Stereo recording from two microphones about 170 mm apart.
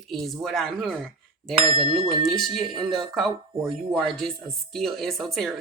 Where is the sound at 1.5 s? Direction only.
35° right (ahead or behind).